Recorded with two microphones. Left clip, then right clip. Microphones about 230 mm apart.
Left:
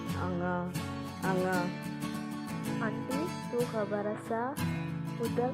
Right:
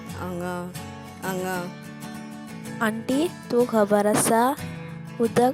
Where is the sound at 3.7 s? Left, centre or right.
Right.